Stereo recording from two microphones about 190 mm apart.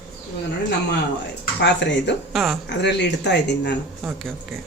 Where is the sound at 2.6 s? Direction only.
65° left (ahead or behind).